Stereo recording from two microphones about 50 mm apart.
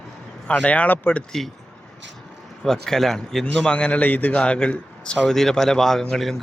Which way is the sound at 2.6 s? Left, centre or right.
Centre.